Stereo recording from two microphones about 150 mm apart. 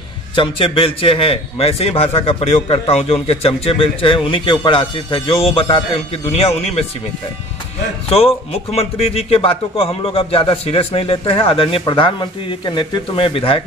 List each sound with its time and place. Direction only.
0.4 s speech: 35° left (ahead or behind)
8.1 s speech: 40° left (ahead or behind)